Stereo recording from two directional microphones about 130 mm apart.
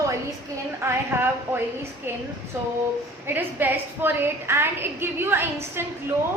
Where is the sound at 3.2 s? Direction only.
15° right (ahead or behind).